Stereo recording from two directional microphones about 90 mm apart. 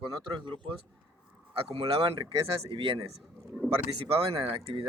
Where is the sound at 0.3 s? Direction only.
65° right (ahead or behind).